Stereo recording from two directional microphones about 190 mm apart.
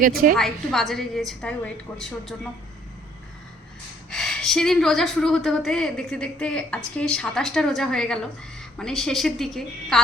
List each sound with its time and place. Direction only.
0.0 s a woman's voice: 50° right (ahead or behind)
0.3 s a woman's voice: centre (ahead or behind)
4.1 s a woman's voice: centre (ahead or behind)